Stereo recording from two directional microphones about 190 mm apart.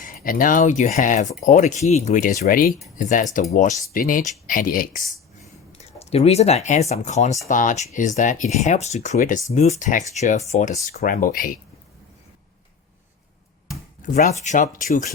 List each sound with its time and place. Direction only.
0.0 s speech: 45° left (ahead or behind)
5.7 s speech: 35° left (ahead or behind)
14.1 s speech: 40° left (ahead or behind)